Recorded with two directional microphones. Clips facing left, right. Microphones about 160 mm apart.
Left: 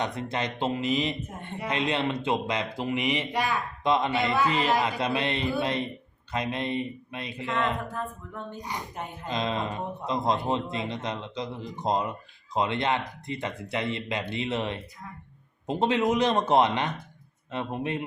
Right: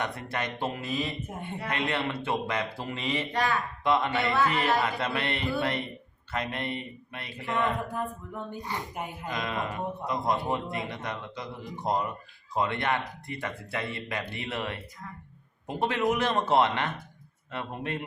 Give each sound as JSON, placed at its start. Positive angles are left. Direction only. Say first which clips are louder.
{"t": 0.0, "sound": "speech", "louder": "left 3 dB", "side_deg": 20}
{"t": 7.9, "sound": "speech", "louder": "right 1 dB", "side_deg": -15}
{"t": 8.5, "sound": "speech", "louder": "right 1 dB", "side_deg": 15}